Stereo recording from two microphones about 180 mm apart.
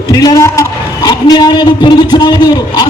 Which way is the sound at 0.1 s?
20° left (ahead or behind).